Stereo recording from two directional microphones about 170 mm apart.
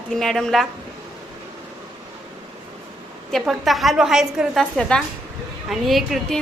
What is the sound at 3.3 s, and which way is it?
A woman's voice, centre (ahead or behind).